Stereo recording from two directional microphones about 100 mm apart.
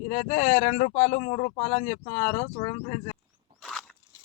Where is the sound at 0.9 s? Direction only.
80° left; by 3.2 s 65° left (ahead or behind).